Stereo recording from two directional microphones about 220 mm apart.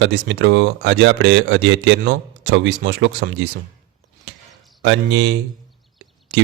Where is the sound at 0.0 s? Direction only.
50° right (ahead or behind).